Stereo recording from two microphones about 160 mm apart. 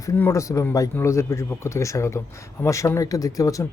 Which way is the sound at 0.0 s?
20° left (ahead or behind).